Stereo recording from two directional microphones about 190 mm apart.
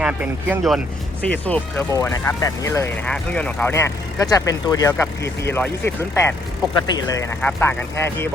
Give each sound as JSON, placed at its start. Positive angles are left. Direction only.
{"t": 0.0, "sound": "speech", "side_deg": -5}
{"t": 1.2, "sound": "speech", "side_deg": 10}